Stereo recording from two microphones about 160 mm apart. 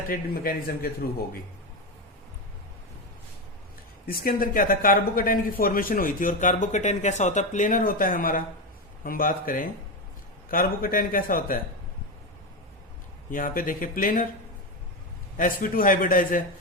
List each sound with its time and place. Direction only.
0.1 s speech: 65° left (ahead or behind)
4.0 s speech: 65° left (ahead or behind)
13.3 s speech: 60° left (ahead or behind)
15.4 s speech: 60° left (ahead or behind)